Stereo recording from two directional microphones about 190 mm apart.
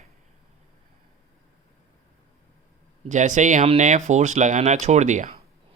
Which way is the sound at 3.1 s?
40° right (ahead or behind).